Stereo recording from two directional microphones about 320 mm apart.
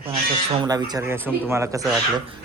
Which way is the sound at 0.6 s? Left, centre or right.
Centre.